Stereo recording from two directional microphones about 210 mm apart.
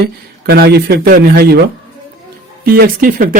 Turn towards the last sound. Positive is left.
turn(degrees=-40)  # may be behind; listen again after turning